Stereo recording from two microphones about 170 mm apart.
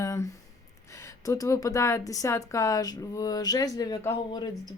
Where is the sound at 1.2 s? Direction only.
20° left (ahead or behind).